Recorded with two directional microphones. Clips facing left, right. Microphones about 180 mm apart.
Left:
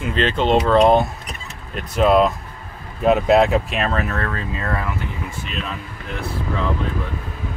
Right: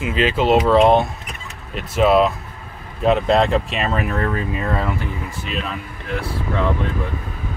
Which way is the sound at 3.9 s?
15° right (ahead or behind).